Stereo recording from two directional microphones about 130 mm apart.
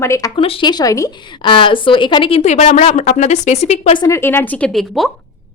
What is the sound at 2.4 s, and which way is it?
A woman's voice, 65° left (ahead or behind).